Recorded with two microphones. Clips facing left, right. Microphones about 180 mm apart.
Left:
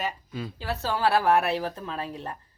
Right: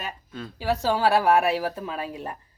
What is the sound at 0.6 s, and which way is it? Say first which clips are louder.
A woman's voice: right 4 dB; 15° right (ahead or behind).